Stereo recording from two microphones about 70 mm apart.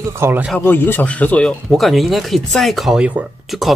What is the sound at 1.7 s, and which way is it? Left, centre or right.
Speech, centre.